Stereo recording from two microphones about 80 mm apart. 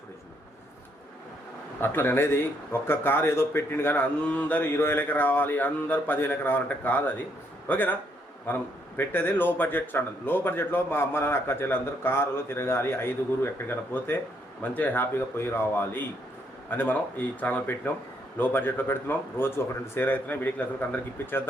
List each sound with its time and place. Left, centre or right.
1.8 s a man's voice: left
4.2 s a man's voice: centre